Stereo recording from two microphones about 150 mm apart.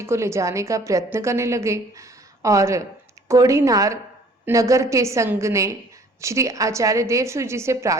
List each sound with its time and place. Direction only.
0.0 s a woman's voice: 20° right (ahead or behind)